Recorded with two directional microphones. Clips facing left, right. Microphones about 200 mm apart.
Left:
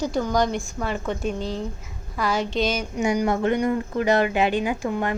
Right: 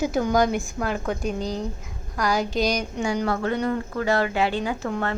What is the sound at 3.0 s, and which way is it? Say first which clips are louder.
Speech: left 4 dB; 20° left (ahead or behind).